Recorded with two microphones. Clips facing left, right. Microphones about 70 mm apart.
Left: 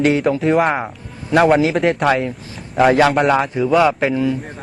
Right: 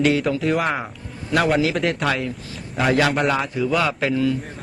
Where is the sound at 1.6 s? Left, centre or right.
Left.